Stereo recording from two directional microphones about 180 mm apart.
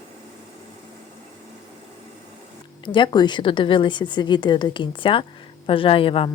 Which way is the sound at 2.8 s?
25° left (ahead or behind).